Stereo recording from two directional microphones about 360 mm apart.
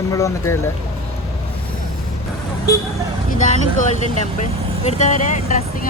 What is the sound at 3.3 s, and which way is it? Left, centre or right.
Speech, centre.